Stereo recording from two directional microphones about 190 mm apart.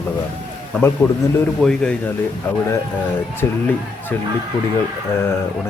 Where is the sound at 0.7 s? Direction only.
10° left (ahead or behind).